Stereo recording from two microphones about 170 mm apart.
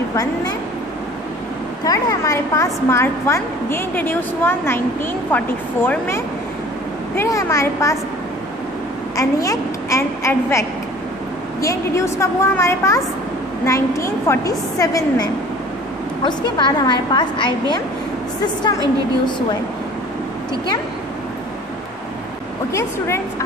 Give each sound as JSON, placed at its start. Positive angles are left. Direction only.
{"t": 0.1, "sound": "a woman's voice", "side_deg": 20}
{"t": 1.9, "sound": "a woman's voice", "side_deg": 20}
{"t": 9.1, "sound": "a woman's voice", "side_deg": 20}
{"t": 11.6, "sound": "a woman's voice", "side_deg": 15}
{"t": 22.7, "sound": "a woman's voice", "side_deg": 15}